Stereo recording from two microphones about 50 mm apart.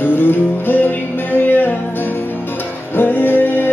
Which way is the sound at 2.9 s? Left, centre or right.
Left.